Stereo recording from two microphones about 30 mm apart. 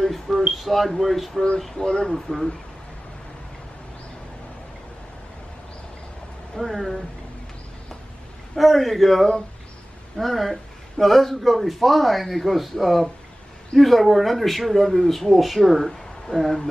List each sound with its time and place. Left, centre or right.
0.0 s a sound: centre
0.5 s speech: centre
1.8 s speech: left
6.6 s speech: centre
8.5 s speech: centre